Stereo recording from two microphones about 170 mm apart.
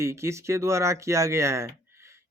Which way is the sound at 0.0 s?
15° right (ahead or behind).